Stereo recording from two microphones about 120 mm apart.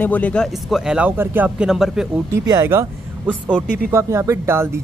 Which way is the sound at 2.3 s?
35° right (ahead or behind).